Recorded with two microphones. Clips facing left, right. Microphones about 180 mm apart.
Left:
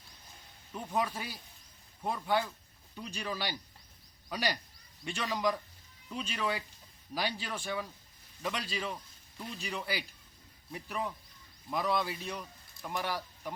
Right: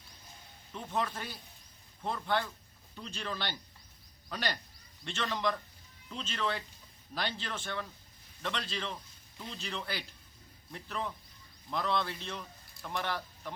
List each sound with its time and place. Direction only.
0.7 s speech: 10° left (ahead or behind)